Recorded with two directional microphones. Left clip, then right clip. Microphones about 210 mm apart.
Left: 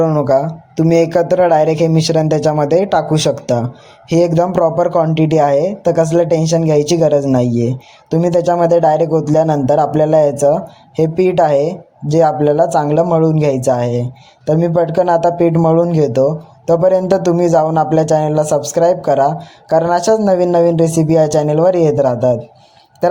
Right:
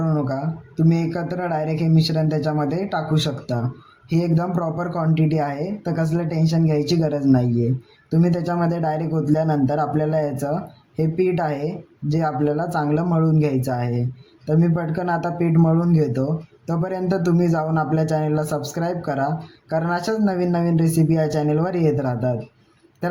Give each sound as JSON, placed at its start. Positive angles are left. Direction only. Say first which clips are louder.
{"t": 0.0, "sound": "a man's voice", "louder": "left 13 dB", "side_deg": 30}